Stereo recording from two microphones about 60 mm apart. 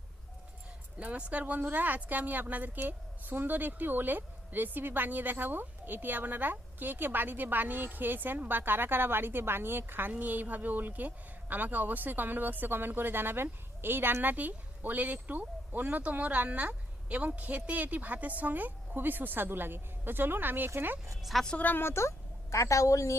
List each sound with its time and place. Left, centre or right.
0.9 s a woman's voice: centre
21.2 s a woman's voice: centre
21.6 s speech: left
22.5 s a woman's voice: left